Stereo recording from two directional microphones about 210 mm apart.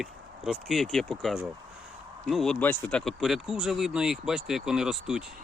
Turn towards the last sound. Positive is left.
turn(degrees=0)  # may be behind; listen again after turning